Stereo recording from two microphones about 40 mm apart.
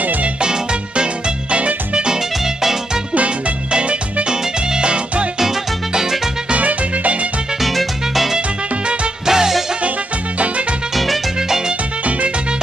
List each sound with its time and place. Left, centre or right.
0.0 s music: right
0.4 s music: right
2.0 s music: centre
3.2 s music: right
5.4 s music: centre
6.5 s music: right
7.6 s music: centre
8.4 s music: right
9.2 s music: centre
11.3 s music: centre